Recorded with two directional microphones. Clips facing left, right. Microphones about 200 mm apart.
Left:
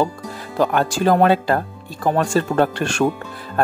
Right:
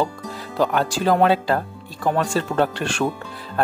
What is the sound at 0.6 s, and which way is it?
Speech, 50° left (ahead or behind).